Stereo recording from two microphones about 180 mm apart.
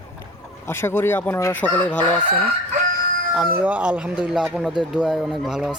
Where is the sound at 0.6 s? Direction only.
15° left (ahead or behind).